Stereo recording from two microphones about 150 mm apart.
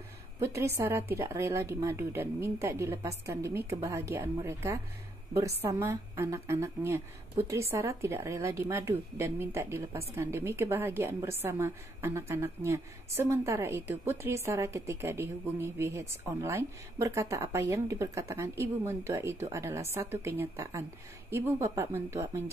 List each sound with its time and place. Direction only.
0.4 s a woman's voice: 20° right (ahead or behind)